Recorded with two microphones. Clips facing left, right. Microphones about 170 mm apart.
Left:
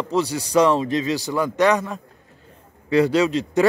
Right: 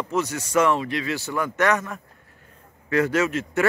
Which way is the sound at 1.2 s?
15° left (ahead or behind).